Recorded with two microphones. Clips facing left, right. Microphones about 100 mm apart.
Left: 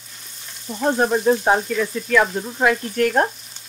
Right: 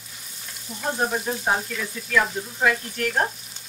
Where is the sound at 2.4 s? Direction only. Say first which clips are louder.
Left 4 dB; 50° left (ahead or behind).